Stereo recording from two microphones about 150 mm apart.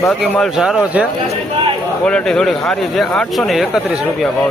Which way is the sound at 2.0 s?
5° left (ahead or behind).